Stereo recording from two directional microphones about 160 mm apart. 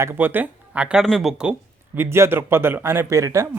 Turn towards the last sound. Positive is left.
turn(degrees=-20)  # may be behind; listen again after turning